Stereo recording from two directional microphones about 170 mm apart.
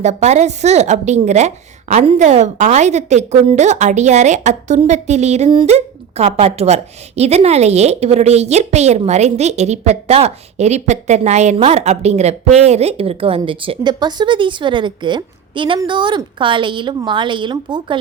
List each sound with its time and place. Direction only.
0.0 s a woman's voice: 40° right (ahead or behind)